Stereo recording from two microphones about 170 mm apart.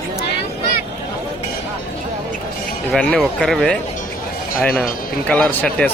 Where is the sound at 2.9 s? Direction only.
5° left (ahead or behind).